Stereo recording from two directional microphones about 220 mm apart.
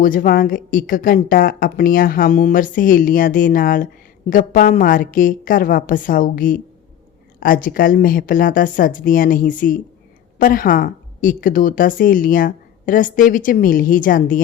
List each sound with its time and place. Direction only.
0.0 s a woman's voice: 40° left (ahead or behind)